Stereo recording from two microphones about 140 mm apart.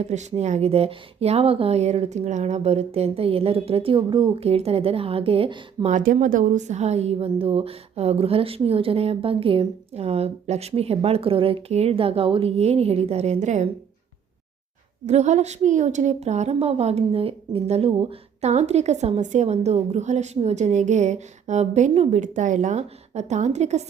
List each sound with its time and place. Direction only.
0.0 s a woman's voice: 55° right (ahead or behind); by 4.3 s 35° right (ahead or behind)
4.4 s a woman's voice: 50° right (ahead or behind)
5.9 s a woman's voice: 70° right (ahead or behind)
15.0 s a woman's voice: 55° right (ahead or behind)